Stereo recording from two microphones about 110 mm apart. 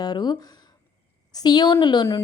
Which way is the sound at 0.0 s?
40° left (ahead or behind).